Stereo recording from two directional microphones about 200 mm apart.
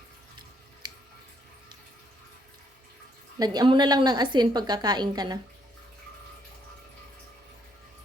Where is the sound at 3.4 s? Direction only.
20° right (ahead or behind).